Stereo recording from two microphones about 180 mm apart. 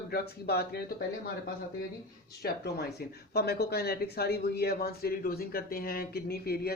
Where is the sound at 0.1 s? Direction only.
60° left (ahead or behind).